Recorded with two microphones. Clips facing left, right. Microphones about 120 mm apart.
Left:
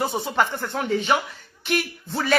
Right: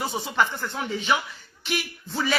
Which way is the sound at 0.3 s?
50° left (ahead or behind).